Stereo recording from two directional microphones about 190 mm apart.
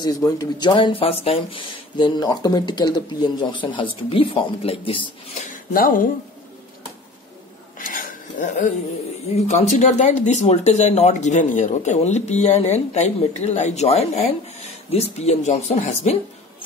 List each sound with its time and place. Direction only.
0.0 s speech: 20° left (ahead or behind)
5.7 s speech: 45° left (ahead or behind)
7.8 s a sound: 45° left (ahead or behind)
9.3 s speech: 35° left (ahead or behind)